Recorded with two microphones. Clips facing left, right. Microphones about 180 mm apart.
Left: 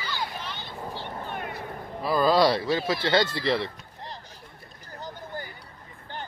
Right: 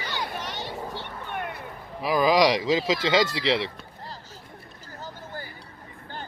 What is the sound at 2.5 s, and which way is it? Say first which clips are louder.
Speech: right 2 dB; 90° right.